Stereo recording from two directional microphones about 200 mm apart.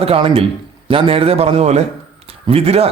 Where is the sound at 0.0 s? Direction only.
30° right (ahead or behind).